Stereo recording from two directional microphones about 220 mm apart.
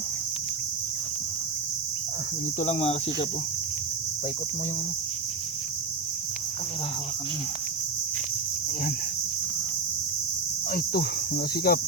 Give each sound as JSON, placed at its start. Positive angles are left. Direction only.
{"t": 2.6, "sound": "speech", "side_deg": 30}
{"t": 10.7, "sound": "speech", "side_deg": 40}